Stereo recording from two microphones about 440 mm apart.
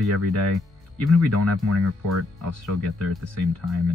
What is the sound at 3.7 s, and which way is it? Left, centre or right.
Speech, centre.